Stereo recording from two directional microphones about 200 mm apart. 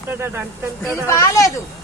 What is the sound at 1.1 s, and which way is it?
Speech, 15° left (ahead or behind).